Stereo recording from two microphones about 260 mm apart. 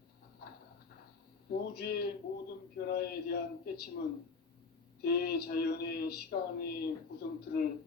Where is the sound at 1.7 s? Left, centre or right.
Left.